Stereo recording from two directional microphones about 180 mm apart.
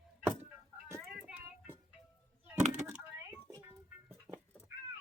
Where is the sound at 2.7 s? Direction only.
5° right (ahead or behind).